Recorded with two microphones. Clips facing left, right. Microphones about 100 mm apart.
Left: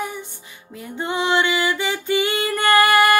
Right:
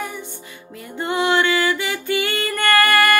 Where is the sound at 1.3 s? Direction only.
15° left (ahead or behind).